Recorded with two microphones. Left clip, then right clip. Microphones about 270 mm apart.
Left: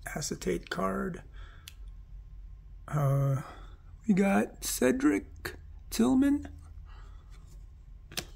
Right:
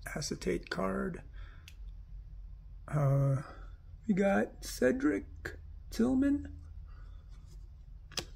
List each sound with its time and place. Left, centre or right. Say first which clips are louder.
0.0 s speech: left 2 dB; centre
2.8 s speech: left 1 dB; centre
4.0 s speech: left 2 dB; centre